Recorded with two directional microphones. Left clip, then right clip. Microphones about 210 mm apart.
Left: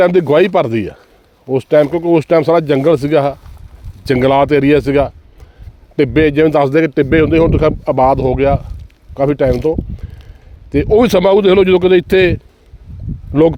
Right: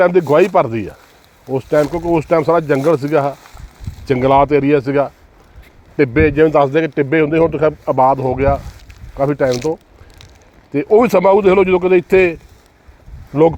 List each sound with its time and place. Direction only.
0.0 s a man's voice: 50° left (ahead or behind)
10.7 s a man's voice: 45° left (ahead or behind)